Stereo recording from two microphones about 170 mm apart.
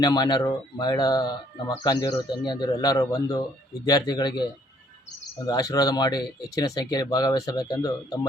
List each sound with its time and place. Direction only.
0.0 s speech: 25° left (ahead or behind)